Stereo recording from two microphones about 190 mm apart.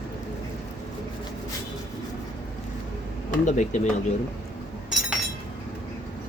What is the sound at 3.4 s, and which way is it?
Speech, 40° left (ahead or behind).